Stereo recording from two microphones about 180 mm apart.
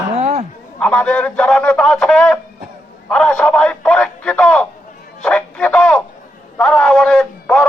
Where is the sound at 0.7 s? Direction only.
5° left (ahead or behind).